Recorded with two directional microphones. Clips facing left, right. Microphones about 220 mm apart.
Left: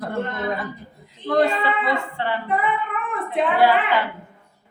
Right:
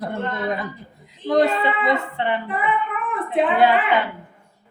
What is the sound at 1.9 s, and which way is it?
Speech, 20° right (ahead or behind).